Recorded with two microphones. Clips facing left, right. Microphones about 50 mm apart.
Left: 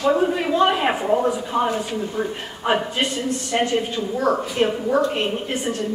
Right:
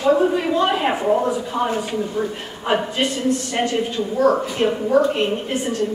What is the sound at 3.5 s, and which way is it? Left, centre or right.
A woman's voice, centre.